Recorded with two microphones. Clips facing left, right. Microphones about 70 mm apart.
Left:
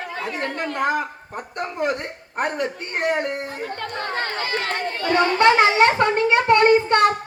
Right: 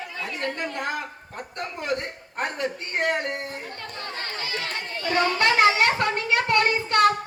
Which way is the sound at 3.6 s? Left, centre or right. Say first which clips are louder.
Left 8 dB; left.